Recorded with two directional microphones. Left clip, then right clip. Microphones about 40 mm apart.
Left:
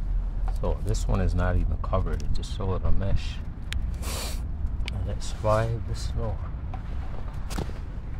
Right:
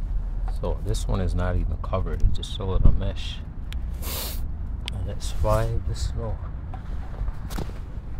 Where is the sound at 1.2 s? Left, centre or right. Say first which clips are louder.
Even; right.